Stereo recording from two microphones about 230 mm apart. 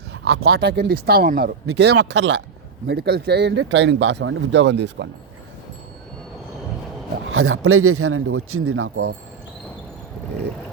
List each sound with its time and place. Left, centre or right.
0.5 s speech: right
7.3 s speech: right